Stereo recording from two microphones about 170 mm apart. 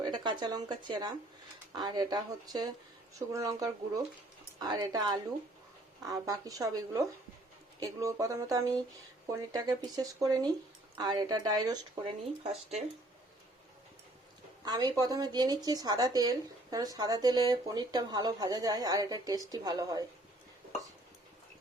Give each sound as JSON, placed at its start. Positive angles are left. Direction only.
{"t": 0.0, "sound": "a woman's voice", "side_deg": -25}
{"t": 12.4, "sound": "speech", "side_deg": -40}
{"t": 14.6, "sound": "a woman's voice", "side_deg": -25}